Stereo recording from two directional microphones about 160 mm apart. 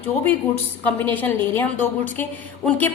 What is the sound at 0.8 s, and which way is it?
A woman's voice, 10° left (ahead or behind).